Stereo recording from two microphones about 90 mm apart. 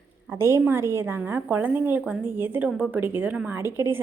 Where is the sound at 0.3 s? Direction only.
30° right (ahead or behind).